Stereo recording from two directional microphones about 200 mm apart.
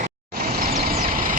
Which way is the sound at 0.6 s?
45° right (ahead or behind).